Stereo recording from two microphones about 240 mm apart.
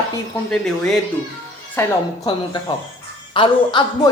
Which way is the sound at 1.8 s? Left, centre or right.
Centre.